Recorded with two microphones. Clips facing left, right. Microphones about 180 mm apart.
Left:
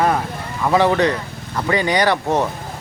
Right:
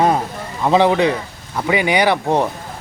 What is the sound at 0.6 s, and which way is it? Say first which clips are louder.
Speech: right 2 dB; 20° right (ahead or behind).